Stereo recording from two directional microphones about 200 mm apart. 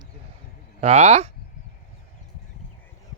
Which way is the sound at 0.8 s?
35° right (ahead or behind).